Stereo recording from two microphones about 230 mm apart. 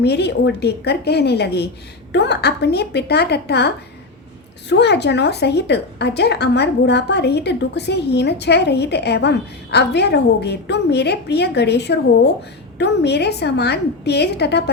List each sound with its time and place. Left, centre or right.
0.0 s a woman's voice: left
4.7 s a woman's voice: left